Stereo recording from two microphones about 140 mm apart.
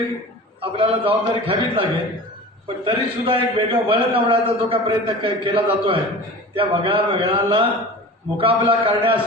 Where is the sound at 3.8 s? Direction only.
40° right (ahead or behind).